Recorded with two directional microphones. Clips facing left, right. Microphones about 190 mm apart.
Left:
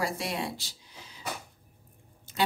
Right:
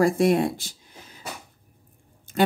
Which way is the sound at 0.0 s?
50° right (ahead or behind).